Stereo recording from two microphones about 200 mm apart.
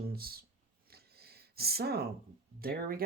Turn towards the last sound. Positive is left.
turn(degrees=-45)  # may be behind; listen again after turning